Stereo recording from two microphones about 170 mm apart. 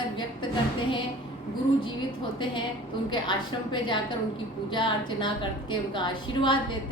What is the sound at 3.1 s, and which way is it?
A woman's voice, 30° left (ahead or behind).